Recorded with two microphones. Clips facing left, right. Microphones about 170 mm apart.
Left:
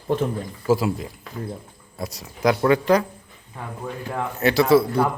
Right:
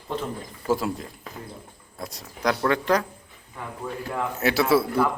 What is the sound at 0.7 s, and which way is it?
Speech, 5° left (ahead or behind).